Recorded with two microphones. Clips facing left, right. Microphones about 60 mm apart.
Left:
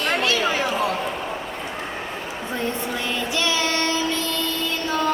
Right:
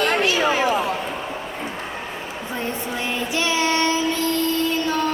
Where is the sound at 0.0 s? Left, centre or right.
Right.